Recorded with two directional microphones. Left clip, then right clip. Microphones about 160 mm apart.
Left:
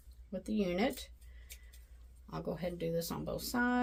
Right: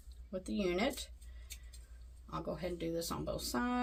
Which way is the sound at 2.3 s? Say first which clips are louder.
Left 1 dB; 45° left (ahead or behind).